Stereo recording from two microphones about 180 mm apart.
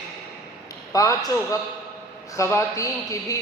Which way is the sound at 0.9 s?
20° left (ahead or behind).